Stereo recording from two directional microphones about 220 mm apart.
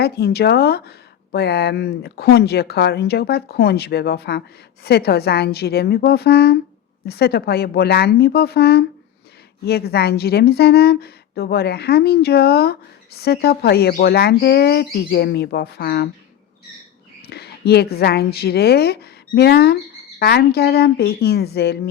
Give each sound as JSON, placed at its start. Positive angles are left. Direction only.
{"t": 0.0, "sound": "speech", "side_deg": 45}
{"t": 17.2, "sound": "a woman's voice", "side_deg": 45}